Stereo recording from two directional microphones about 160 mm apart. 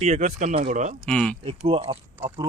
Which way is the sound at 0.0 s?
45° right (ahead or behind).